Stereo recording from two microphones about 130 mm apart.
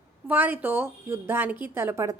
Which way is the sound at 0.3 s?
10° right (ahead or behind).